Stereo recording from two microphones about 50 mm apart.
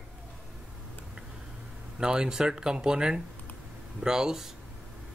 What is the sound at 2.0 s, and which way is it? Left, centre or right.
Speech, centre.